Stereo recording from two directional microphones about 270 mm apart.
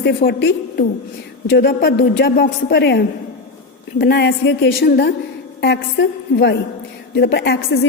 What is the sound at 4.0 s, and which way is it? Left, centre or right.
A woman's voice, left.